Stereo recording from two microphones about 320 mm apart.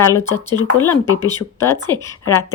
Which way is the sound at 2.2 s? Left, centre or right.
Centre.